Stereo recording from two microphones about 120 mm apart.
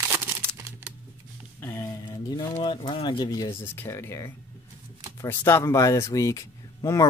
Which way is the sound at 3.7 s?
20° left (ahead or behind).